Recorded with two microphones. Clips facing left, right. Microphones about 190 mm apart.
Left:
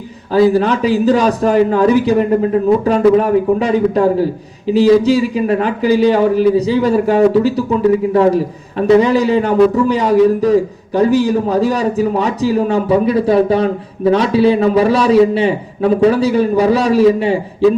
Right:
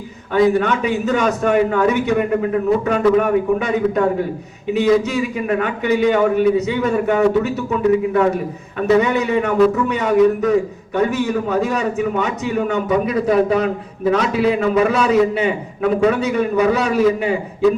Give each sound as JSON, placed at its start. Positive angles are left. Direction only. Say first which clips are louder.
{"t": 0.3, "sound": "a man's voice", "louder": "left 4 dB", "side_deg": 30}